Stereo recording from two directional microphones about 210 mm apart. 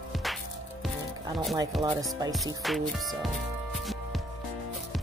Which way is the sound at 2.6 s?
Centre (ahead or behind).